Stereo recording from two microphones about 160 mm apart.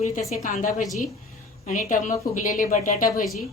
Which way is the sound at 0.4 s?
50° left (ahead or behind).